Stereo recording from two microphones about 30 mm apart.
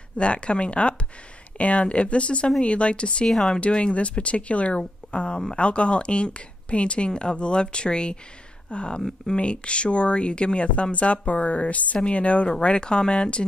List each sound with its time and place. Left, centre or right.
0.2 s speech: left
3.3 s speech: centre
3.9 s speech: left
12.6 s speech: left